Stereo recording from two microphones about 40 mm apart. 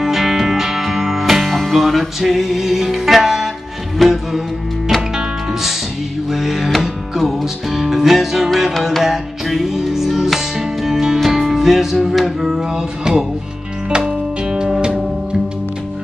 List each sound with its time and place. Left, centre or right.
0.0 s music: centre